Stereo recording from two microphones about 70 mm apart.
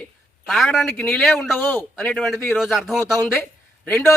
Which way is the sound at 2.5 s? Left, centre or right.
Centre.